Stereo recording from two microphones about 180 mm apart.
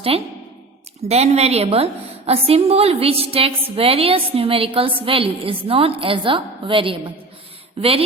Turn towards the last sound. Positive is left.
turn(degrees=-35)  # may be behind; listen again after turning